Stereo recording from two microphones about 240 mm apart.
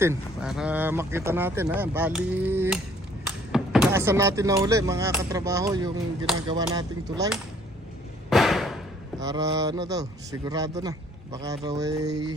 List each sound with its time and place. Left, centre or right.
0.0 s speech: centre
8.3 s a sound: centre
9.2 s speech: centre